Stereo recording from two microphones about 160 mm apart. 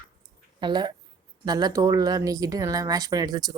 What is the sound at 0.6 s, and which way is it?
Speech, 25° right (ahead or behind).